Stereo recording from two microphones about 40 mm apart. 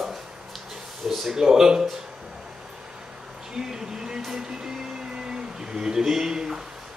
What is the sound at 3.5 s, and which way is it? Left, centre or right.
Vehicle, centre.